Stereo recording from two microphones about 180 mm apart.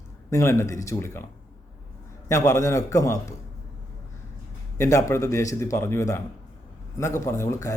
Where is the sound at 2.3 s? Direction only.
15° left (ahead or behind).